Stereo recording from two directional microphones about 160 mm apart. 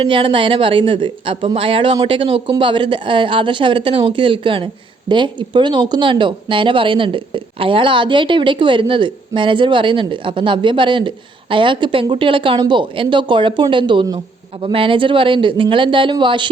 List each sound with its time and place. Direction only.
0.0 s a woman's voice: 35° right (ahead or behind)